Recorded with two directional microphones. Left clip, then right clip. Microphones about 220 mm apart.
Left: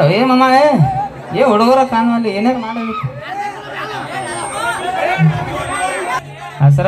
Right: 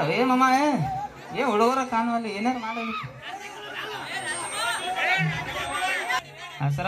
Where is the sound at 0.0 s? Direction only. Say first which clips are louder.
Left 10 dB; 45° left (ahead or behind).